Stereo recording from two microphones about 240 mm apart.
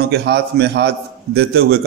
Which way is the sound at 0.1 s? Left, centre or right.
Right.